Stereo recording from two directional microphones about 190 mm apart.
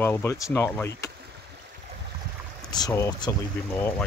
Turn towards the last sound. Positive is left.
turn(degrees=10)  # may be behind; listen again after turning